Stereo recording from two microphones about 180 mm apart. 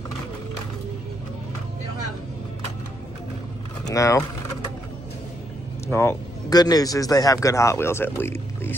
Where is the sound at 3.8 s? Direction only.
20° left (ahead or behind).